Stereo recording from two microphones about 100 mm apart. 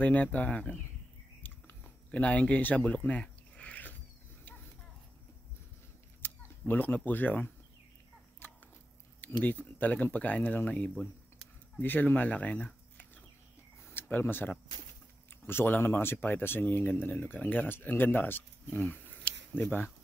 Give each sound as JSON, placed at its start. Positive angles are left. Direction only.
{"t": 0.0, "sound": "speech", "side_deg": 15}
{"t": 1.4, "sound": "a sound", "side_deg": 15}
{"t": 6.2, "sound": "camera", "side_deg": 20}
{"t": 6.7, "sound": "speech", "side_deg": 20}
{"t": 9.2, "sound": "speech", "side_deg": 15}